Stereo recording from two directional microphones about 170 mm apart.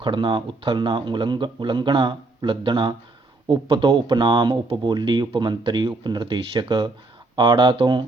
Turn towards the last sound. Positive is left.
turn(degrees=-25)  # may be behind; listen again after turning